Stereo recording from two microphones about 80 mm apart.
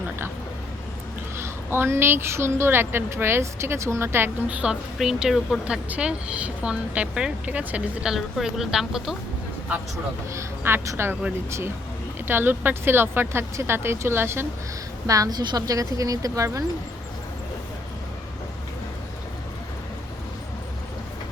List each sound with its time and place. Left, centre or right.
1.4 s a woman's voice: right
4.4 s speech: centre
4.9 s a woman's voice: centre
8.0 s a woman's voice: centre
10.3 s a woman's voice: right
12.3 s a woman's voice: right
15.0 s a woman's voice: right